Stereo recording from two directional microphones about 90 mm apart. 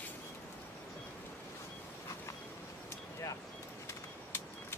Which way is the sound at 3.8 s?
30° left (ahead or behind).